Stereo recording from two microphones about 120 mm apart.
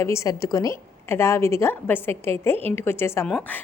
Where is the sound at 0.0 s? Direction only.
25° left (ahead or behind).